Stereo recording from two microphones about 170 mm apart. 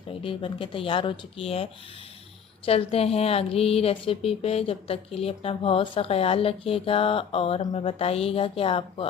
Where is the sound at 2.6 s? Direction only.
35° left (ahead or behind).